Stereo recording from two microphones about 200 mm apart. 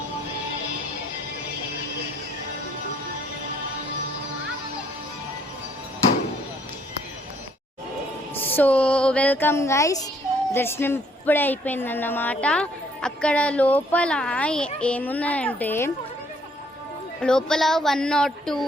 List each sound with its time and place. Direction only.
8.4 s a child's voice: 10° left (ahead or behind)
17.2 s speech: 5° left (ahead or behind)